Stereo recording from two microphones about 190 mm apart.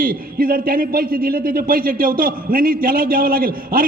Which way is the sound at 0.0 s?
50° right (ahead or behind).